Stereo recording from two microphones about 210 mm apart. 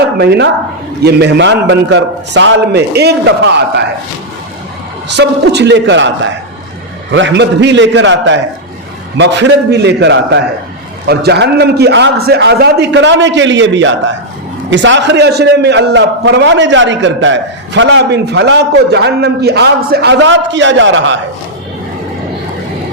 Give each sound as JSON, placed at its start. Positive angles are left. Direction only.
{"t": 0.2, "sound": "a man's voice", "side_deg": -55}
{"t": 5.0, "sound": "a man's voice", "side_deg": -55}